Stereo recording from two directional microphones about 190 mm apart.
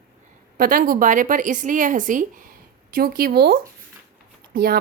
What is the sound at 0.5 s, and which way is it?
A woman's voice, 50° right (ahead or behind).